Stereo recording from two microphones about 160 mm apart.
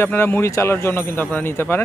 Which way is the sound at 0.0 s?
15° left (ahead or behind).